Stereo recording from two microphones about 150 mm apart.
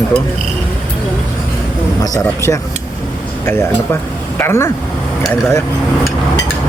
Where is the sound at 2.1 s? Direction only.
20° left (ahead or behind).